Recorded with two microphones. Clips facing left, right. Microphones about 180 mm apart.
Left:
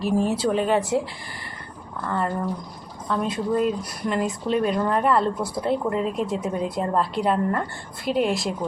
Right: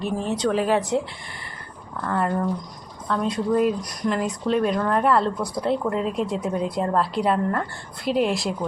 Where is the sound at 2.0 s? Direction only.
5° right (ahead or behind).